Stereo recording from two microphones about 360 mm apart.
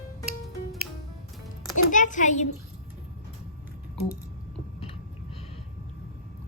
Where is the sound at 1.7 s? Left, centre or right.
Left.